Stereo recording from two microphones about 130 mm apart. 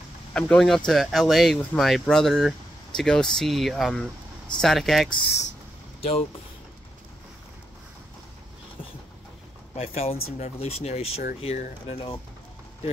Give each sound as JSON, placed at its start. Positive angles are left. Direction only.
{"t": 0.3, "sound": "speech", "side_deg": 5}
{"t": 5.9, "sound": "speech", "side_deg": 50}
{"t": 9.8, "sound": "speech", "side_deg": 50}
{"t": 11.9, "sound": "speech", "side_deg": 40}